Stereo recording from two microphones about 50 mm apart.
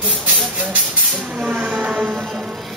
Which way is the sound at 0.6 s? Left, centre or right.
Right.